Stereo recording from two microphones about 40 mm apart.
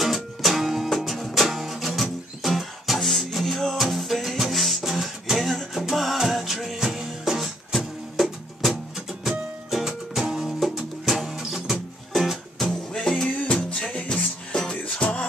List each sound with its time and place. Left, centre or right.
0.0 s music: centre
12.2 s music: centre
12.9 s music: centre
13.4 s music: left
14.0 s music: left